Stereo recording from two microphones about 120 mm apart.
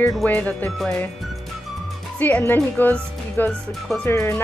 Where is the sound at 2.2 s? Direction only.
15° left (ahead or behind).